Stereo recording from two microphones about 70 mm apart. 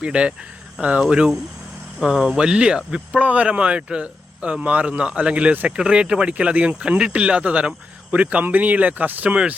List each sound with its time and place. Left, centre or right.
0.0 s speech: centre